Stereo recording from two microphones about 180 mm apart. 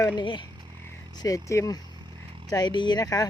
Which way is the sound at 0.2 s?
25° left (ahead or behind).